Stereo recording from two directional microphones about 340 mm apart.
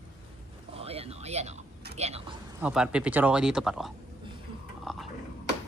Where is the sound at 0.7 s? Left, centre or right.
Centre.